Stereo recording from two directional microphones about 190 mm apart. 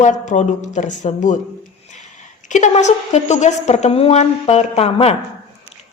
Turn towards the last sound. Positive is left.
turn(degrees=30)  # may be behind; listen again after turning